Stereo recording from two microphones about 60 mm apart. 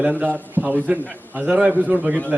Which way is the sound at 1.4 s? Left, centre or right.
Right.